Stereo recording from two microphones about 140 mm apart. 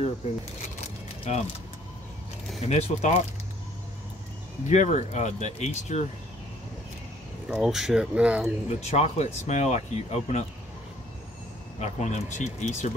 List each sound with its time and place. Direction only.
1.3 s speech: 50° left (ahead or behind)
2.6 s speech: 50° left (ahead or behind)
4.6 s speech: 55° left (ahead or behind)
7.4 s speech: 5° right (ahead or behind)
8.6 s speech: 50° left (ahead or behind)
11.8 s speech: 55° left (ahead or behind)